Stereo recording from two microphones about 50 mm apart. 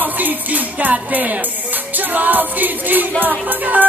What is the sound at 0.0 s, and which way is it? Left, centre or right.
Music, right.